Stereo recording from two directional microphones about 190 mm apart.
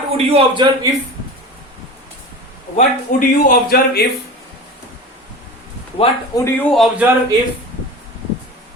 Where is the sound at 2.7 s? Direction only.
45° left (ahead or behind).